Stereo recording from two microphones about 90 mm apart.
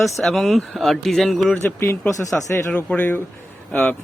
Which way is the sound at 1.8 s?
35° left (ahead or behind).